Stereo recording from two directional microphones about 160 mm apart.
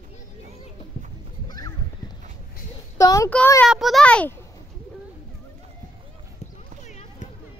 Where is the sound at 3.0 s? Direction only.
20° left (ahead or behind).